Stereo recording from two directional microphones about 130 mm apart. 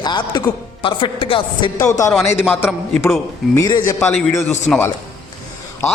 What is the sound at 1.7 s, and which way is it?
A man's voice, 25° left (ahead or behind).